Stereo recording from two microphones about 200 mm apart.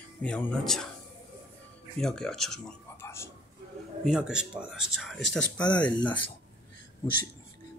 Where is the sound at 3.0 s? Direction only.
15° left (ahead or behind).